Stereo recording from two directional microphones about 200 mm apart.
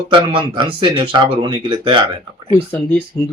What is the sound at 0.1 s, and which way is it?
Speech, 25° right (ahead or behind).